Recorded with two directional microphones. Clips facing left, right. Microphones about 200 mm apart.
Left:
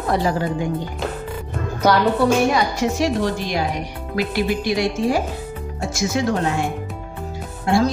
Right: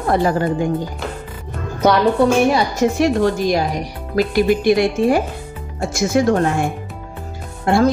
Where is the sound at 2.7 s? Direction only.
50° right (ahead or behind).